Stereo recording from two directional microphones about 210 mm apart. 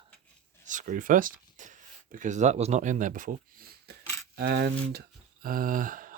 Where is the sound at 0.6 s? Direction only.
35° right (ahead or behind).